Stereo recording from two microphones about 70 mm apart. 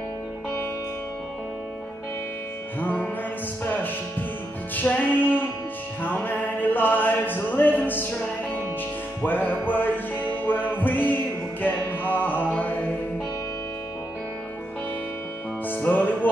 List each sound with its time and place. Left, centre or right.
2.8 s music: left
9.2 s music: left
15.7 s music: left